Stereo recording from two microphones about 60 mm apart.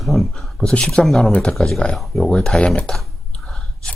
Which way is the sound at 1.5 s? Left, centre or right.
Centre.